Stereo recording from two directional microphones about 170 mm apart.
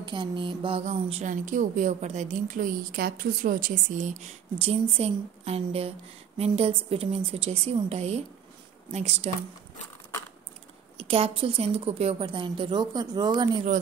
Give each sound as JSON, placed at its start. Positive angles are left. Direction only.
{"t": 0.0, "sound": "a sound", "side_deg": -30}
{"t": 0.8, "sound": "a woman's voice", "side_deg": -40}
{"t": 11.0, "sound": "a woman's voice", "side_deg": -35}